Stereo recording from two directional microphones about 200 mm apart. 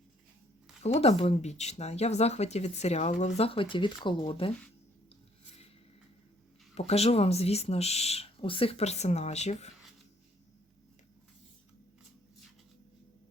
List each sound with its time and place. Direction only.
0.8 s speech: 30° left (ahead or behind)
6.7 s speech: 30° left (ahead or behind)